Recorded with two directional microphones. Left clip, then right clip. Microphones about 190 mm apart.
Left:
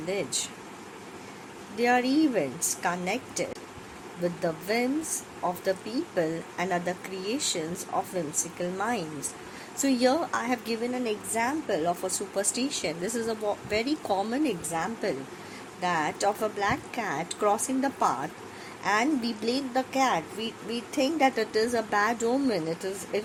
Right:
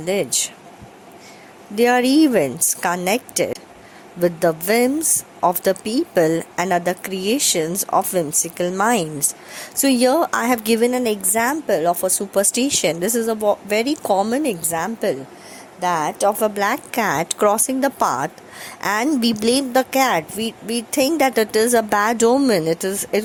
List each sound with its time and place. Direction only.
0.0 s a woman's voice: 50° right (ahead or behind)
1.7 s a woman's voice: 50° right (ahead or behind)
16.6 s a woman's voice: 55° right (ahead or behind)